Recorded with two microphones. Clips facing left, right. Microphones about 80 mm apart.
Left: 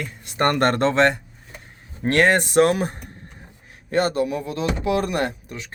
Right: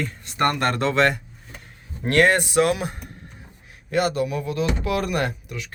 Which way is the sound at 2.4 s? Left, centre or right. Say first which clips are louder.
Left 3 dB; left.